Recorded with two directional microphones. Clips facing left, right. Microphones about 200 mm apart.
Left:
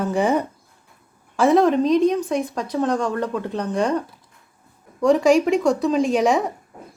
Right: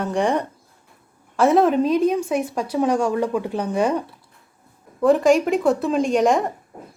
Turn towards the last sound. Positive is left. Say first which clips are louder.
# even
turn(degrees=0)  # may be behind; listen again after turning